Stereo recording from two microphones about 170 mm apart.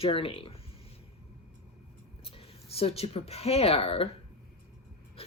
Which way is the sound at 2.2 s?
35° left (ahead or behind).